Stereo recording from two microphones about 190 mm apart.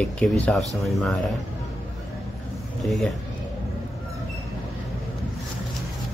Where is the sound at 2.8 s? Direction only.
Centre (ahead or behind).